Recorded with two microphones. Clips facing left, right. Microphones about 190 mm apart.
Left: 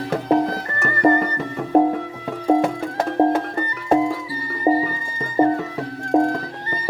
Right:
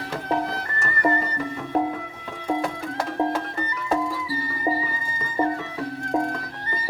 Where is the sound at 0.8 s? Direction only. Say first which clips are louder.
Left 7 dB; 50° left (ahead or behind).